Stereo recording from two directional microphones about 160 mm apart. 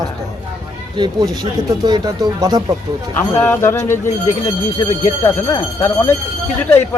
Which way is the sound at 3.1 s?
15° left (ahead or behind).